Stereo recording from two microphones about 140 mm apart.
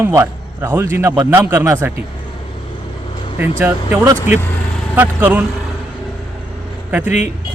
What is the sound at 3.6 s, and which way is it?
A man's voice, 20° right (ahead or behind).